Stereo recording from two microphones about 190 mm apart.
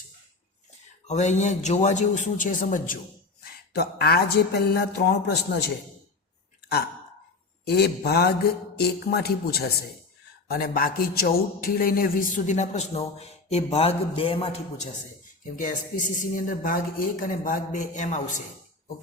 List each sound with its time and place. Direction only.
1.0 s a man's voice: 40° left (ahead or behind); by 5.7 s 60° left (ahead or behind)
7.6 s a man's voice: 60° left (ahead or behind); by 14.8 s 30° left (ahead or behind)
15.5 s speech: 45° left (ahead or behind)